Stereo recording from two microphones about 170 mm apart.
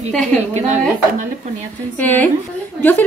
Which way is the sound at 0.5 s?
45° right (ahead or behind).